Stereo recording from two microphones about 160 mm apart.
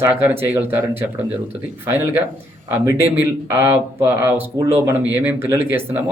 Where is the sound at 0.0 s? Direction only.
15° right (ahead or behind).